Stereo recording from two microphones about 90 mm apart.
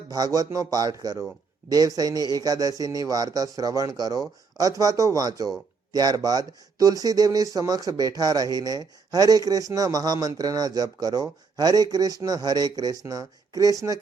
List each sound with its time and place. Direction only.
0.1 s speech: 45° right (ahead or behind)